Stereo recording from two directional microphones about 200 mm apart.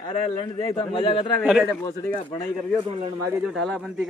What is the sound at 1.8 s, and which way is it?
Speech, 15° left (ahead or behind).